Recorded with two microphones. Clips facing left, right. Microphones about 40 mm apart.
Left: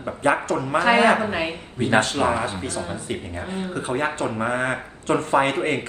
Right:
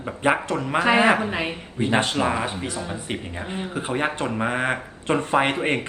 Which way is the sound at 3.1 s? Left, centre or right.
Right.